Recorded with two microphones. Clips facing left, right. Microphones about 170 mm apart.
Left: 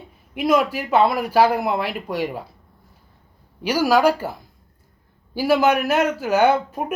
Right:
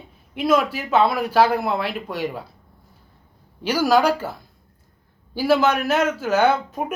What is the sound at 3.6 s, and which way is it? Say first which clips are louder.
Speech: left 1 dB; 5° left (ahead or behind).